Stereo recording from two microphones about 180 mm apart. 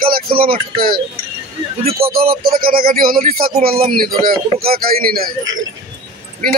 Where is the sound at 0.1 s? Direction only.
55° right (ahead or behind).